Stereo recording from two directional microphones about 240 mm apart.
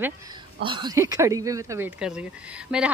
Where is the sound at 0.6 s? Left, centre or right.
Centre.